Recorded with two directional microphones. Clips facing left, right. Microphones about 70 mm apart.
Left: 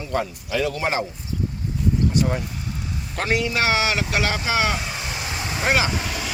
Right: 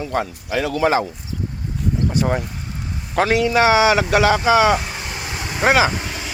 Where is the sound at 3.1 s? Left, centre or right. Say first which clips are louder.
Right 6 dB; right.